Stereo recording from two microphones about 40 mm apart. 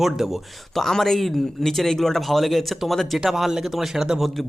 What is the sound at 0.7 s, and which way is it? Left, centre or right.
Speech, centre.